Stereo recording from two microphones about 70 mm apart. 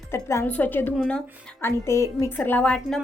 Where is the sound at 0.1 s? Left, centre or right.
Left.